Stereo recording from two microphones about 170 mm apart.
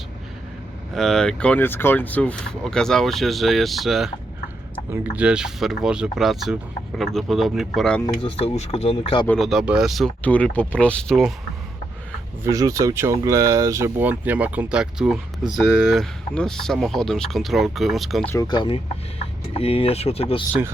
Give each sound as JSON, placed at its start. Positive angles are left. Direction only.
{"t": 0.9, "sound": "speech", "side_deg": 5}
{"t": 8.0, "sound": "speech", "side_deg": 35}
{"t": 9.2, "sound": "speech", "side_deg": 5}
{"t": 12.4, "sound": "speech", "side_deg": -20}
{"t": 18.3, "sound": "speech", "side_deg": 20}